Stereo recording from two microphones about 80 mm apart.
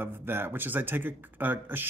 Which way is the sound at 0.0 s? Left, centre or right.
Right.